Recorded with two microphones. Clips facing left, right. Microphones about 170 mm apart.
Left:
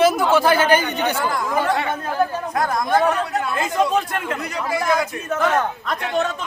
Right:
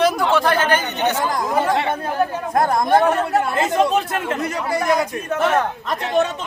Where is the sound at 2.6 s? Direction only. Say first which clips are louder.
Right 2 dB; 25° right (ahead or behind).